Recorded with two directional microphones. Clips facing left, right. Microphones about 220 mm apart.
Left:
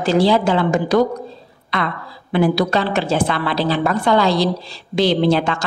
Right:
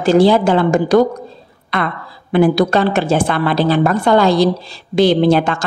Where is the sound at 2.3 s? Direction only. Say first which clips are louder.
Right 4 dB; 50° right (ahead or behind).